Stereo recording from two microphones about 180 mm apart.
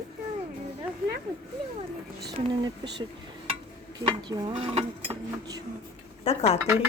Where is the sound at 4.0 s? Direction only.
25° right (ahead or behind).